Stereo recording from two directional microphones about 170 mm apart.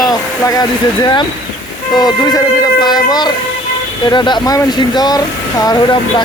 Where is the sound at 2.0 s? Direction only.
25° left (ahead or behind).